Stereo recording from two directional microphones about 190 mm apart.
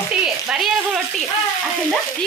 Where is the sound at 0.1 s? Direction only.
5° right (ahead or behind).